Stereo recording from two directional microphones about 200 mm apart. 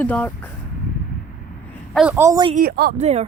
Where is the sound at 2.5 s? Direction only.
45° right (ahead or behind).